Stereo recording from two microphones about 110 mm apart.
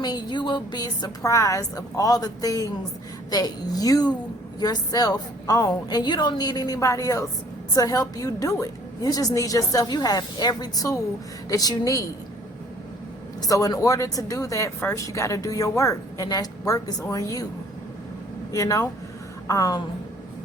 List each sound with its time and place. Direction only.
0.0 s a woman's voice: 40° left (ahead or behind)
13.4 s a woman's voice: 30° left (ahead or behind)
18.5 s a woman's voice: 30° left (ahead or behind)